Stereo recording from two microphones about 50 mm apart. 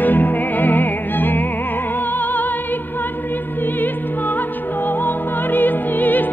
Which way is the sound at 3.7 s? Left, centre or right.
Left.